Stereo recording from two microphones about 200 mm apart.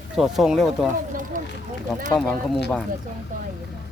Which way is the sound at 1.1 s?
40° right (ahead or behind).